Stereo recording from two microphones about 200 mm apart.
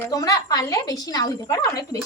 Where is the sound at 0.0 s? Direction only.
20° left (ahead or behind).